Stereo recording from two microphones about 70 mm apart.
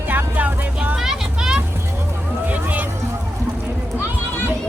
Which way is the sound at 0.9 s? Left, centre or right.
Centre.